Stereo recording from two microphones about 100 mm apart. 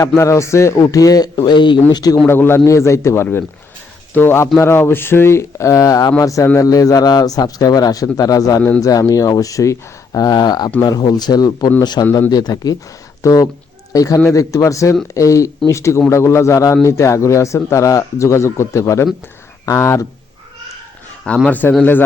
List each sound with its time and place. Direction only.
0.2 s a man's voice: 30° left (ahead or behind)
2.2 s a man's voice: 25° left (ahead or behind)
21.4 s speech: 15° left (ahead or behind)